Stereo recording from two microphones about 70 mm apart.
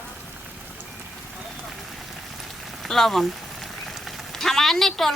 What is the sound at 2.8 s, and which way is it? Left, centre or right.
Rain on surface, centre.